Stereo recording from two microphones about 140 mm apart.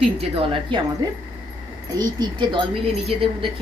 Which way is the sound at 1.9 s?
35° right (ahead or behind).